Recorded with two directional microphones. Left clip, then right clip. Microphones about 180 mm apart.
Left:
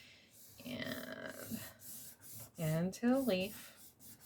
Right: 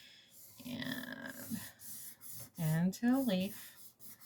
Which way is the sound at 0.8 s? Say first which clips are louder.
Right 1 dB; 20° left (ahead or behind).